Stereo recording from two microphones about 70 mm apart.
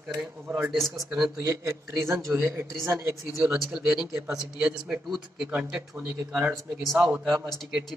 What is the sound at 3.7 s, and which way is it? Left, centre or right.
A man's voice, centre.